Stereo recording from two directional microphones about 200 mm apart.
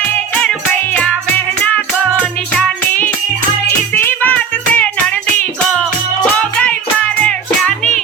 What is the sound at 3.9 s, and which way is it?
Music, 10° left (ahead or behind).